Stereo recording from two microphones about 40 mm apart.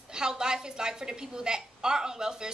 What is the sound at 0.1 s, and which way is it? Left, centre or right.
A woman's voice, centre.